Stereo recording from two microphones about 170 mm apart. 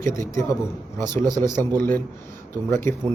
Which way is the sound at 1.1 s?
25° right (ahead or behind).